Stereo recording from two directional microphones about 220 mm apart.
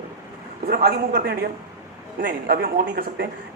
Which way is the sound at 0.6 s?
45° right (ahead or behind).